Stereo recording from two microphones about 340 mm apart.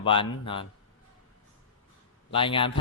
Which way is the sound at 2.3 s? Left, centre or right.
Centre.